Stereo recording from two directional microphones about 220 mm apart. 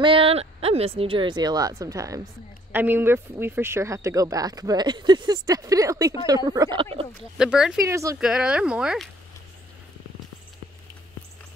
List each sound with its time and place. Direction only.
0.0 s speech: 25° right (ahead or behind)
7.3 s speech: 5° right (ahead or behind)
7.9 s speech: 15° right (ahead or behind)
8.2 s speech: 5° right (ahead or behind)